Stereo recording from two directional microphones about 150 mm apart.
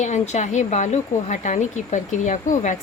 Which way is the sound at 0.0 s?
50° left (ahead or behind).